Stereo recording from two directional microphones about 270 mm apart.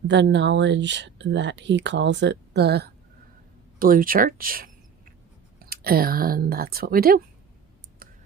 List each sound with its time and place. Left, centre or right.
0.1 s speech: right